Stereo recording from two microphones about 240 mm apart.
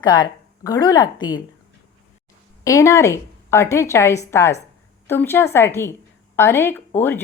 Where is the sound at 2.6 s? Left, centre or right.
Centre.